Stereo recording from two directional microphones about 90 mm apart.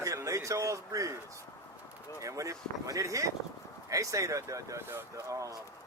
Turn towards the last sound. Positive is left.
turn(degrees=-35)  # may be behind; listen again after turning